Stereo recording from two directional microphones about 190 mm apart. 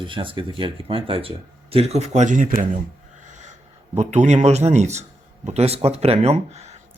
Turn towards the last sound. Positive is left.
turn(degrees=-35)  # may be behind; listen again after turning